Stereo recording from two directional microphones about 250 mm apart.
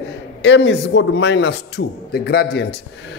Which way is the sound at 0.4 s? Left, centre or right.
Left.